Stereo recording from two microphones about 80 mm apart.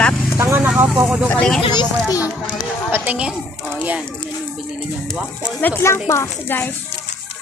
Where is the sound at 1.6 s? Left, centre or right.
Left.